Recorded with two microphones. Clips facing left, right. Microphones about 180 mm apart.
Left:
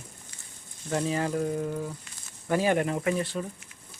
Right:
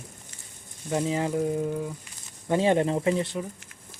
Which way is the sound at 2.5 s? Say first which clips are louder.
Right 3 dB; 25° right (ahead or behind).